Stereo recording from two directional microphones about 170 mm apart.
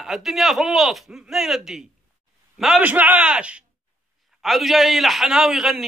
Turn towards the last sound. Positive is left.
turn(degrees=0)  # may be behind; listen again after turning